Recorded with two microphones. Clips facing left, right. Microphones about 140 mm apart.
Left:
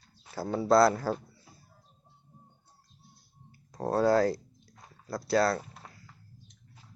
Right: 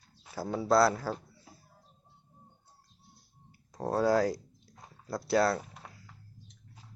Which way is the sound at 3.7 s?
5° right (ahead or behind).